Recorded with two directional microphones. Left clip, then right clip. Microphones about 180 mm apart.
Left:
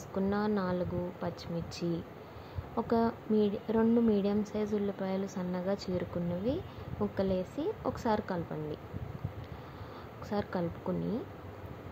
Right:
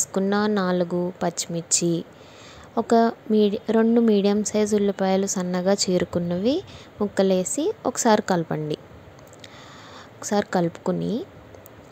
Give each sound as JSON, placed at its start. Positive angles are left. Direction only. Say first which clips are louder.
{"t": 0.1, "sound": "a woman's voice", "louder": "right 8 dB", "side_deg": -45}
{"t": 10.2, "sound": "a woman's voice", "louder": "right 12 dB", "side_deg": -45}